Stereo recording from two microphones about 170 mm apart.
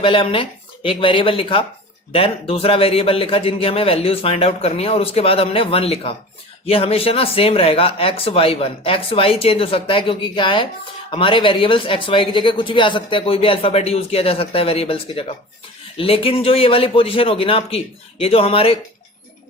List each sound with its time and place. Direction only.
0.0 s speech: 30° left (ahead or behind)